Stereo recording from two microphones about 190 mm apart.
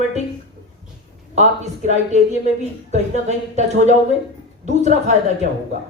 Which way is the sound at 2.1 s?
40° right (ahead or behind).